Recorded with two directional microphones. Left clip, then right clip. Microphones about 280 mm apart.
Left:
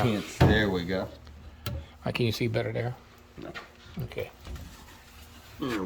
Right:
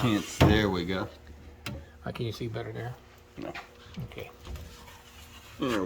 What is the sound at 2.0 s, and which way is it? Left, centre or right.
Speech, left.